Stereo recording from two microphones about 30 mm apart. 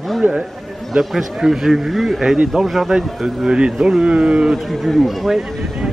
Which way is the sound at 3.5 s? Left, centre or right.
Right.